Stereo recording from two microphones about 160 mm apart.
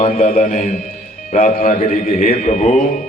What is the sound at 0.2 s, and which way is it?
Speech, 60° left (ahead or behind).